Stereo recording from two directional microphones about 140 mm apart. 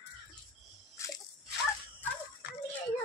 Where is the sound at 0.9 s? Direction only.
20° left (ahead or behind).